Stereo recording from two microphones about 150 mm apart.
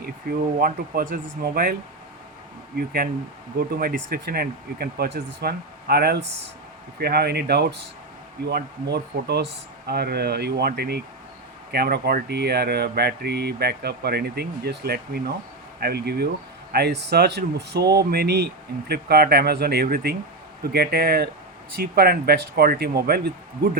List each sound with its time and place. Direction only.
0.0 s speech: 80° right
2.7 s speech: 75° right (ahead or behind)